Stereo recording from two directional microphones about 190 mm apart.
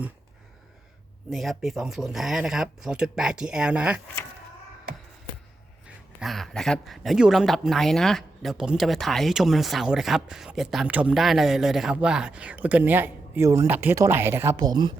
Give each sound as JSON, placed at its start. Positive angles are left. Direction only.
{"t": 1.3, "sound": "speech", "side_deg": 0}
{"t": 6.1, "sound": "speech", "side_deg": 0}